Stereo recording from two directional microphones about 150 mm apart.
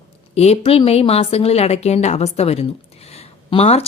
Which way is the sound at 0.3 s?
40° left (ahead or behind).